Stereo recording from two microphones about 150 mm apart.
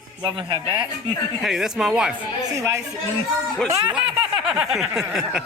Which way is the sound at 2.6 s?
20° right (ahead or behind).